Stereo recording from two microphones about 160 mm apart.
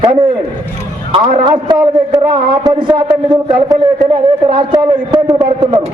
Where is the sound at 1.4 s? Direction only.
30° right (ahead or behind).